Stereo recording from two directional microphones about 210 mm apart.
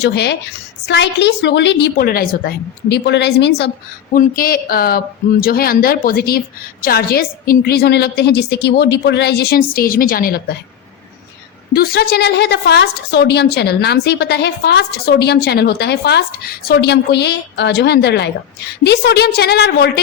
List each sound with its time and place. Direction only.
0.0 s a woman's voice: 55° left (ahead or behind)
4.1 s a woman's voice: 40° left (ahead or behind)
11.7 s a woman's voice: 45° left (ahead or behind)